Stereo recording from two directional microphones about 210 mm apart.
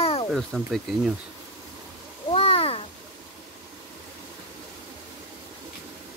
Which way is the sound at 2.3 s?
30° left (ahead or behind).